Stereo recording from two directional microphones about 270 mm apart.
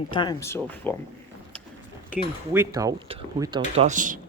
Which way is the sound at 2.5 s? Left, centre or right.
Centre.